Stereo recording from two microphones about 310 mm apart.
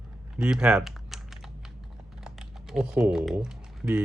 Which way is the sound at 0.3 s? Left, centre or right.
Centre.